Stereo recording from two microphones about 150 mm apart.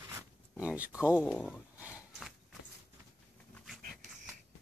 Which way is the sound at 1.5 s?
10° right (ahead or behind).